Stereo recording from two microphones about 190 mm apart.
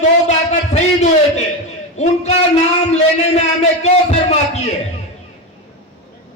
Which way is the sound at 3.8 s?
35° left (ahead or behind).